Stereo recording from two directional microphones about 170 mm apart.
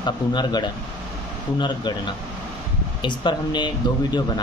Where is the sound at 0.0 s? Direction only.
25° left (ahead or behind).